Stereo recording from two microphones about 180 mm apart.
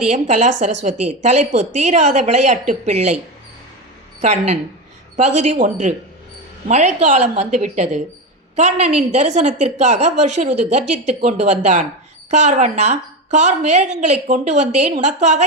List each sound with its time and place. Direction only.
0.1 s a woman's voice: 40° right (ahead or behind)
4.2 s a woman's voice: 40° right (ahead or behind)